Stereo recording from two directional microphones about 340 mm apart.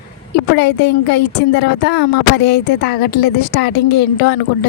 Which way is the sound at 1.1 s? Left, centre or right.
Left.